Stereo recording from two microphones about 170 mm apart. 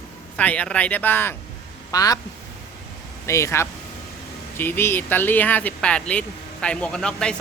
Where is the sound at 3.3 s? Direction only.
15° left (ahead or behind).